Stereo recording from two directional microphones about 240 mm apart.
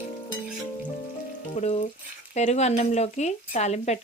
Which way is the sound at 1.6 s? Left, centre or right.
Left.